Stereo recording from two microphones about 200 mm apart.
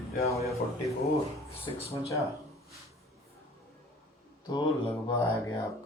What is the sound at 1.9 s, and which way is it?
Speech, 15° left (ahead or behind).